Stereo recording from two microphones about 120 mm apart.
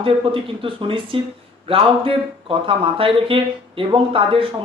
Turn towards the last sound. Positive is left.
turn(degrees=-50)  # may be behind; listen again after turning